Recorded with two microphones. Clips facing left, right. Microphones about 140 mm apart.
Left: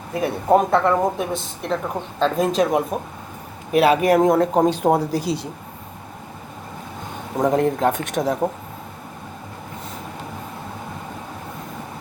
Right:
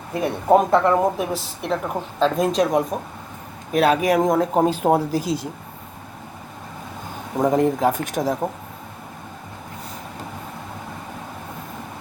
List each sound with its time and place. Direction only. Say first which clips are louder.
0.1 s a woman's voice: even; centre (ahead or behind)
7.3 s a woman's voice: even; centre (ahead or behind)